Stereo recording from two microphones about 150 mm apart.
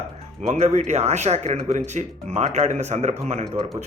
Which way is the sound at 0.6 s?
50° right (ahead or behind).